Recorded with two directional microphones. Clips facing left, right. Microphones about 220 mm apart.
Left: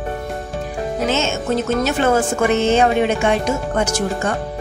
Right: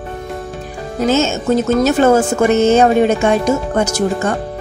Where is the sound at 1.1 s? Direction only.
40° right (ahead or behind).